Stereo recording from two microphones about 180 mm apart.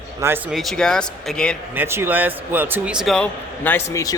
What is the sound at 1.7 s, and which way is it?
A man's voice, 10° right (ahead or behind).